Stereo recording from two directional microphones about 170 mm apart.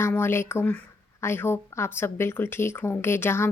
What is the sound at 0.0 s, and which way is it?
A woman's voice, 15° left (ahead or behind).